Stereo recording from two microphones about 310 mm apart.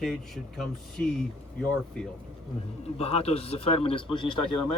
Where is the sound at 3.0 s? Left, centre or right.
Centre.